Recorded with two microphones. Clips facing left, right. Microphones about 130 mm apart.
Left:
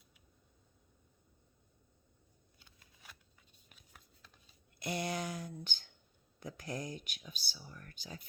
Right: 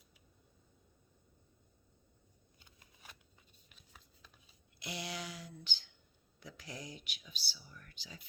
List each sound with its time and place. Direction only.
4.8 s speech: 50° left (ahead or behind)